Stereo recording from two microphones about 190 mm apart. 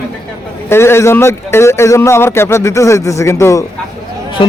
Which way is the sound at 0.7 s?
15° left (ahead or behind).